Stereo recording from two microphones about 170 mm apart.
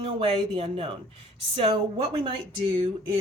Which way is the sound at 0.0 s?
35° right (ahead or behind).